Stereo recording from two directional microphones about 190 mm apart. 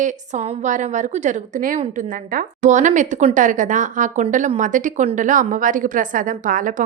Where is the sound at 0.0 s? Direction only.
40° right (ahead or behind).